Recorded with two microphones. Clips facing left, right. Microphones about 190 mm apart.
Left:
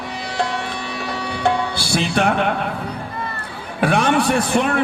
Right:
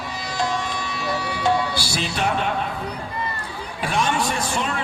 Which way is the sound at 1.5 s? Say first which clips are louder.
Left 2 dB; 60° left (ahead or behind).